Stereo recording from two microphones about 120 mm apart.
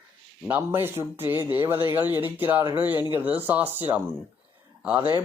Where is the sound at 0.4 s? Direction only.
15° right (ahead or behind).